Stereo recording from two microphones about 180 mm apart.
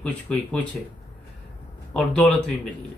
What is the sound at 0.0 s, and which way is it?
Speech, 5° left (ahead or behind).